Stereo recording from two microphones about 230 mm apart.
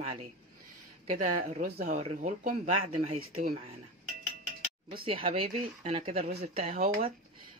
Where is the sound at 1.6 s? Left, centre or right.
Right.